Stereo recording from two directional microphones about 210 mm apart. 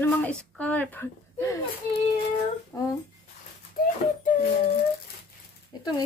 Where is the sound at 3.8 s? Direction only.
45° left (ahead or behind).